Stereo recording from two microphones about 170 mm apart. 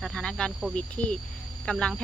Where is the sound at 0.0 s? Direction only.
5° left (ahead or behind).